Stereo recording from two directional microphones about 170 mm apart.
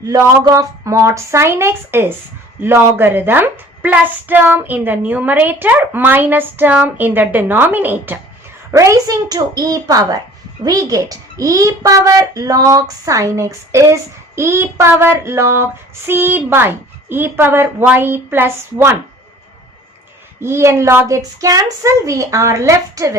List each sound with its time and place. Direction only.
0.0 s a child's voice: 20° right (ahead or behind)
20.4 s a child's voice: 15° right (ahead or behind)